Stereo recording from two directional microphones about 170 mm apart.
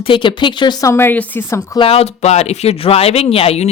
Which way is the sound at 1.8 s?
35° left (ahead or behind).